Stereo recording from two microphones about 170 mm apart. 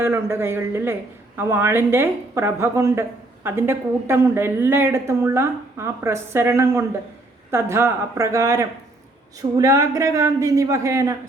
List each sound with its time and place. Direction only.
0.0 s a woman's voice: 15° right (ahead or behind)